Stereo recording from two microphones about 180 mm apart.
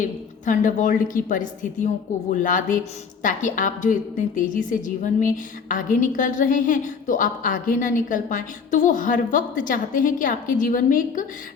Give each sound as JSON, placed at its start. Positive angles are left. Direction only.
{"t": 0.0, "sound": "a woman's voice", "side_deg": 45}